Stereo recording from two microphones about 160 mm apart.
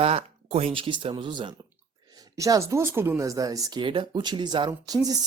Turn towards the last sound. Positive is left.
turn(degrees=-25)  # may be behind; listen again after turning